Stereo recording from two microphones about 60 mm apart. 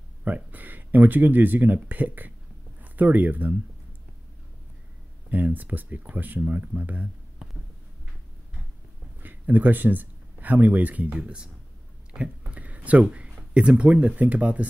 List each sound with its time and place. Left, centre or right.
0.2 s speech: right
5.3 s speech: right
9.2 s speech: right
12.1 s a sound: centre
13.0 s speech: centre